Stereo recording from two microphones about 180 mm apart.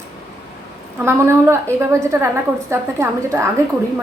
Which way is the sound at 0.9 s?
15° right (ahead or behind).